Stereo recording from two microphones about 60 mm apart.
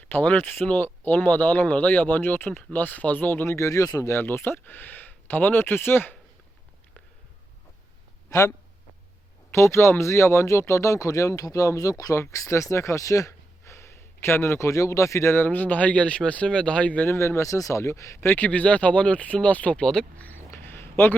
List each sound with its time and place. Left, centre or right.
0.0 s speech: left
3.4 s speech: left
4.1 s speech: left
8.3 s speech: left
12.2 s speech: left
15.4 s speech: left
17.1 s speech: left
18.2 s speech: left; by 20.2 s centre
20.5 s a sound: left